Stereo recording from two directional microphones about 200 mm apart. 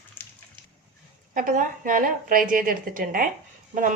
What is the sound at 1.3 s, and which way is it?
A woman's voice, 40° right (ahead or behind).